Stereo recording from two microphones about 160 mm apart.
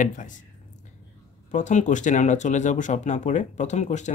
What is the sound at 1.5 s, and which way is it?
Speech, 50° left (ahead or behind).